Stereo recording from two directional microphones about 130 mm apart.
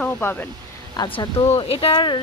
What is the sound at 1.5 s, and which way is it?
Speech, 45° left (ahead or behind).